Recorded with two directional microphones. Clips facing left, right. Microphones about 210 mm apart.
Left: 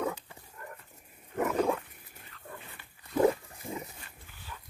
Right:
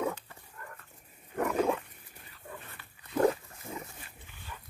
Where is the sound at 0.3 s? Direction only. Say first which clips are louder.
Left 2 dB; 20° left (ahead or behind).